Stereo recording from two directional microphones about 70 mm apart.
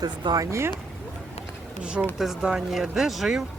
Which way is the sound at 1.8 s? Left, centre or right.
Centre.